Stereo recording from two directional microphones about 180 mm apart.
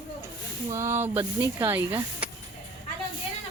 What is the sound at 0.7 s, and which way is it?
Speech, 15° right (ahead or behind).